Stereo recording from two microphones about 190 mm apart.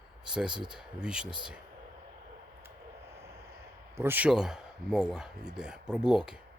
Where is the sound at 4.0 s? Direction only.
10° right (ahead or behind).